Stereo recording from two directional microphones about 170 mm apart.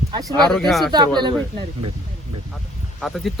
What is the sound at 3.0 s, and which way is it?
Speech, centre (ahead or behind).